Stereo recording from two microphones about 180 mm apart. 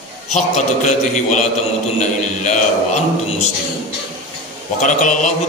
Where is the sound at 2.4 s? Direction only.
40° left (ahead or behind).